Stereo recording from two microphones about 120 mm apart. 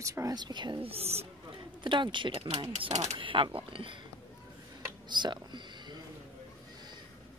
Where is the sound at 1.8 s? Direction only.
40° right (ahead or behind).